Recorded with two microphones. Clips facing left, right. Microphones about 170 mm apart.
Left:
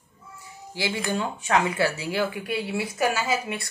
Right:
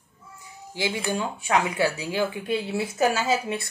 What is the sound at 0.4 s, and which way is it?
Speech, 15° right (ahead or behind).